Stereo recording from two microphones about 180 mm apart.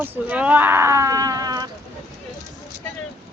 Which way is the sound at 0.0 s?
10° right (ahead or behind).